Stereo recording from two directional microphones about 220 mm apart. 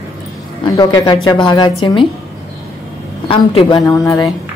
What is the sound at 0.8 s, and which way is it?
A woman's voice, 20° left (ahead or behind).